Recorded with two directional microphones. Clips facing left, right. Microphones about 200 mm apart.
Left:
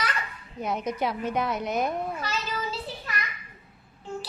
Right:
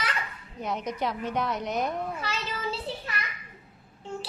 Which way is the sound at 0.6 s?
10° left (ahead or behind).